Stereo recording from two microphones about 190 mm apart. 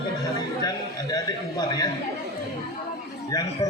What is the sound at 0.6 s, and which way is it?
A man's voice, 20° left (ahead or behind).